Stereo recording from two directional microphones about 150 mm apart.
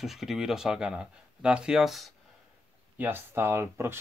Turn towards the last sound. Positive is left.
turn(degrees=-15)  # may be behind; listen again after turning